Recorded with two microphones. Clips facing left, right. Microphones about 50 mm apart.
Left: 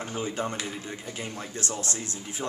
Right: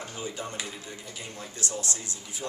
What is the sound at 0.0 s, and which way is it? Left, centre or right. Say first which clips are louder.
Speech: left 5 dB; left.